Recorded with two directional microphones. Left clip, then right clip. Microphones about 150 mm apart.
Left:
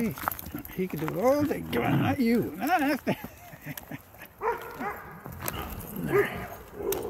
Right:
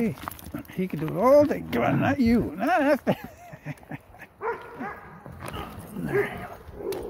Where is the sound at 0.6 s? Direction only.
45° right (ahead or behind).